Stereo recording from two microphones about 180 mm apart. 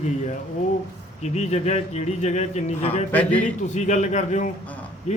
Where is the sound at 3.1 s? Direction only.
10° left (ahead or behind).